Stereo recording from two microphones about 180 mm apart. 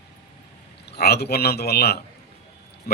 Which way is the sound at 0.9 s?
60° left (ahead or behind).